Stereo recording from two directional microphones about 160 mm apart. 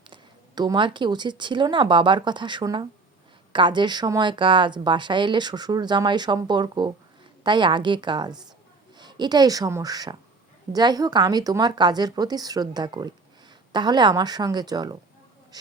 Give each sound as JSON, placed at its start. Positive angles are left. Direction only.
{"t": 0.0, "sound": "speech", "side_deg": -30}